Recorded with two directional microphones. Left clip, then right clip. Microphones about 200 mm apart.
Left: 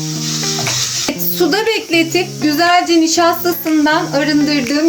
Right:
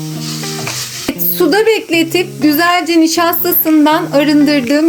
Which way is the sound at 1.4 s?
40° right (ahead or behind).